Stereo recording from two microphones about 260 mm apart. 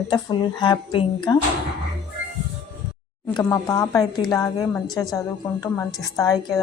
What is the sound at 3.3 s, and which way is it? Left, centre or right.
A woman's voice, centre.